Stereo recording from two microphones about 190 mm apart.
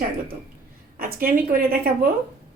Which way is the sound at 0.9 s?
50° right (ahead or behind).